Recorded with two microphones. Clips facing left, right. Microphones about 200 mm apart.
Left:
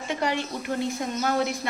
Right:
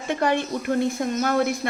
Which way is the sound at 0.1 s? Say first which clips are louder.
Right 5 dB; 55° right (ahead or behind).